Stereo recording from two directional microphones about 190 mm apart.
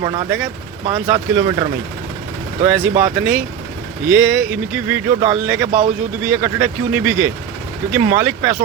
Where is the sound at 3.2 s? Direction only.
5° right (ahead or behind).